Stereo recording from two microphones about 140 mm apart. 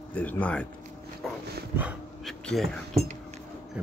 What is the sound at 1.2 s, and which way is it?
Dog, centre (ahead or behind).